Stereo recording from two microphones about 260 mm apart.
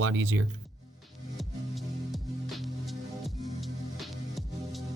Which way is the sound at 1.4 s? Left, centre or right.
Centre.